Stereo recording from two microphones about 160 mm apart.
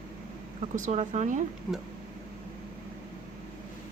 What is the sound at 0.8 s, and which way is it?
Speech, 45° right (ahead or behind).